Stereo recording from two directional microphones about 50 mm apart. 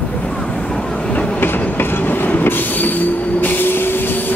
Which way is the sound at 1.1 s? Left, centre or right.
Left.